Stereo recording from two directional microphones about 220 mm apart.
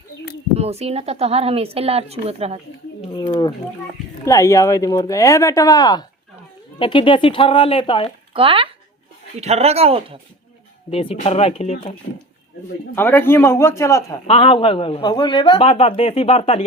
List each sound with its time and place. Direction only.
0.5 s speech: 30° right (ahead or behind)
3.0 s a man's voice: 25° left (ahead or behind)
8.3 s speech: 25° right (ahead or behind)
10.9 s a man's voice: 25° left (ahead or behind)
13.0 s speech: 10° left (ahead or behind)
14.3 s a man's voice: 25° left (ahead or behind)